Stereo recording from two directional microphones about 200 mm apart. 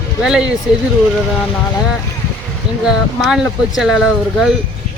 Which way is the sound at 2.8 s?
Centre (ahead or behind).